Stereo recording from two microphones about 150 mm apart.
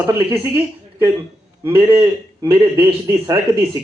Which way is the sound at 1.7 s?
35° right (ahead or behind).